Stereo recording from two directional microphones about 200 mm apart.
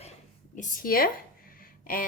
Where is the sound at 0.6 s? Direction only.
45° left (ahead or behind).